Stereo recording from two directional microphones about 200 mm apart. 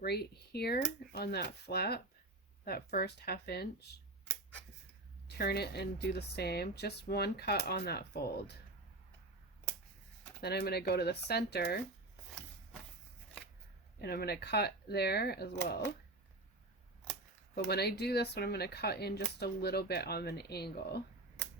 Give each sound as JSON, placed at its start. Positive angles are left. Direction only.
{"t": 0.0, "sound": "speech", "side_deg": 55}
{"t": 5.4, "sound": "speech", "side_deg": 50}
{"t": 10.4, "sound": "speech", "side_deg": 55}
{"t": 14.0, "sound": "speech", "side_deg": 50}
{"t": 17.7, "sound": "speech", "side_deg": 55}